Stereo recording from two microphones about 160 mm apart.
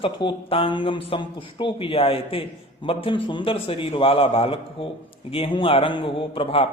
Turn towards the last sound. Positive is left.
turn(degrees=35)  # may be behind; listen again after turning